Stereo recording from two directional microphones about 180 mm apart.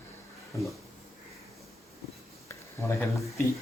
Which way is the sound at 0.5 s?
20° left (ahead or behind).